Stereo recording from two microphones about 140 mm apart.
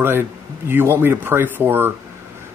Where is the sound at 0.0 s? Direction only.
15° right (ahead or behind).